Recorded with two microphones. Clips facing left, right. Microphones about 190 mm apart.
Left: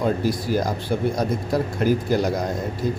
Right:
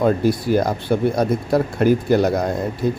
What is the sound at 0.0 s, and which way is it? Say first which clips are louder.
Speech: right 5 dB; 60° right (ahead or behind).